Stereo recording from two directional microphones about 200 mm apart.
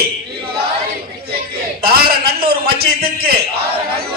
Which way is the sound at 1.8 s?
50° right (ahead or behind).